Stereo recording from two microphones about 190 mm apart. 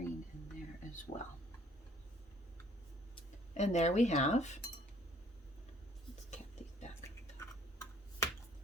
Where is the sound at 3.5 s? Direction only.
35° left (ahead or behind).